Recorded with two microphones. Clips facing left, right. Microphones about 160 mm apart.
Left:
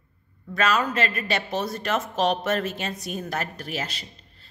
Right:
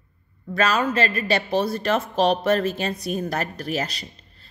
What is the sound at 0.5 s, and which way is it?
A woman's voice, 35° right (ahead or behind).